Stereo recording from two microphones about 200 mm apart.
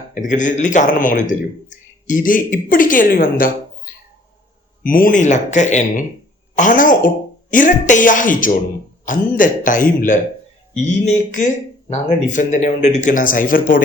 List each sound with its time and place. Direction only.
0.1 s a woman's voice: 40° left (ahead or behind)
4.8 s speech: 45° left (ahead or behind)